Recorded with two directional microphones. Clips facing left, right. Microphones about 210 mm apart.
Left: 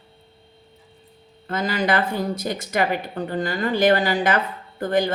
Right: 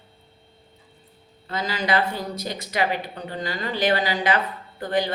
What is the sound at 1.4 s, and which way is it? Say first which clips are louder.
Speech: left 3 dB; 50° left (ahead or behind).